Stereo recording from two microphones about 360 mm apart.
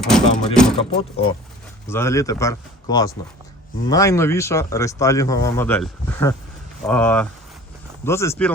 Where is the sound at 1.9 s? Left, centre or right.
Centre.